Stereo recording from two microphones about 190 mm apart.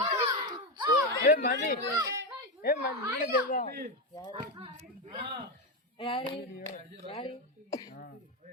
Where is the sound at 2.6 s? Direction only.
55° left (ahead or behind).